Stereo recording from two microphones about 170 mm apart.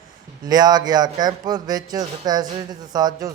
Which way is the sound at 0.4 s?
25° right (ahead or behind).